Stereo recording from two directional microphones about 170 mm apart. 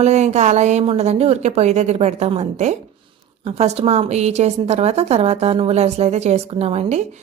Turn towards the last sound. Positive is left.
turn(degrees=-40)  # may be behind; listen again after turning